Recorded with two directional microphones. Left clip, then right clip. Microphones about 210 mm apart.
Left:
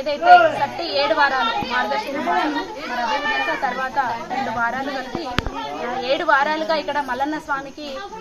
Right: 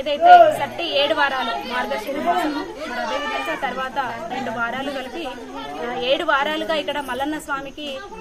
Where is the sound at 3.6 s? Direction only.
20° right (ahead or behind).